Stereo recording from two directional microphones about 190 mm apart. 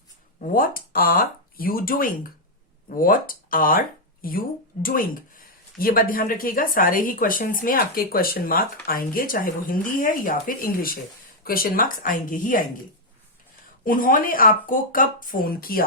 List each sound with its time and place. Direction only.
0.3 s speech: 45° left (ahead or behind)
13.8 s speech: 45° left (ahead or behind)